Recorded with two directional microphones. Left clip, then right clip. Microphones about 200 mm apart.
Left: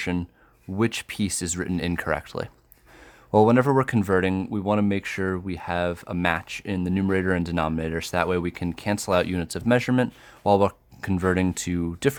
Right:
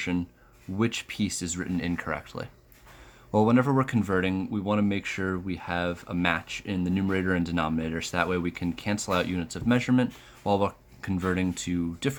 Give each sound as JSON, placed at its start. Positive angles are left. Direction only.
{"t": 0.0, "sound": "speech", "side_deg": 45}